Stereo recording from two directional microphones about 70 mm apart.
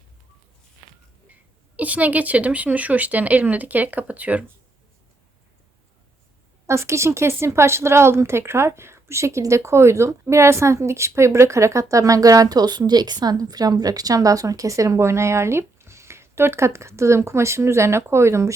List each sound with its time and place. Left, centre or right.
1.7 s speech: right
6.7 s a woman's voice: right